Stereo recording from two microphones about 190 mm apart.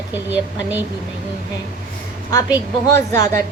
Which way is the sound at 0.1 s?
10° right (ahead or behind).